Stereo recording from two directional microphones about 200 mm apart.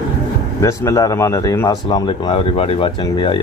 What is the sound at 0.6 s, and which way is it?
Speech, 15° left (ahead or behind).